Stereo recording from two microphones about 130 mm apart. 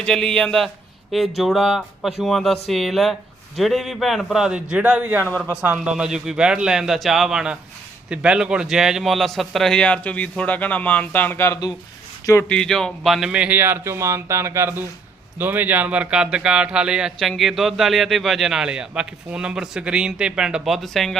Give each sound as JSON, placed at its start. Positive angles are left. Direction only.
{"t": 0.0, "sound": "a man's voice", "side_deg": 5}
{"t": 12.5, "sound": "a man's voice", "side_deg": 5}